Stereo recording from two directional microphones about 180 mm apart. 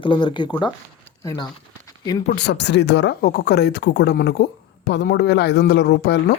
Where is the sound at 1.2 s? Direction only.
20° left (ahead or behind).